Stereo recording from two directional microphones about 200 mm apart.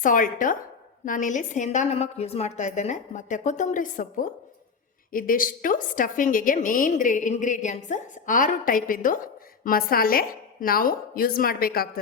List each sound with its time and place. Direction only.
0.0 s a woman's voice: 40° left (ahead or behind)